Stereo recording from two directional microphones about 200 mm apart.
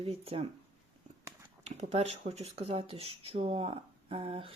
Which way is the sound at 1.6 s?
30° right (ahead or behind).